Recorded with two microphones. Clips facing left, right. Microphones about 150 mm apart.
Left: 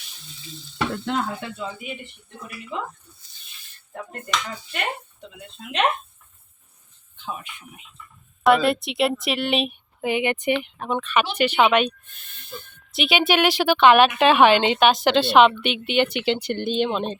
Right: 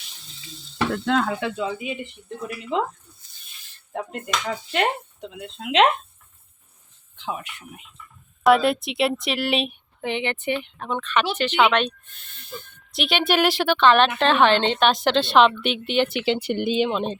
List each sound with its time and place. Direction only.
1.0 s speech: 90° right
2.7 s speech: 90° right
3.9 s speech: 90° right
7.2 s speech: 80° right
8.4 s a woman's voice: centre (ahead or behind)
13.7 s a woman's voice: 10° left (ahead or behind)